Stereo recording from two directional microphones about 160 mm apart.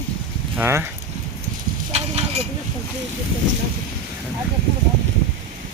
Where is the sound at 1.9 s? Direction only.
40° right (ahead or behind).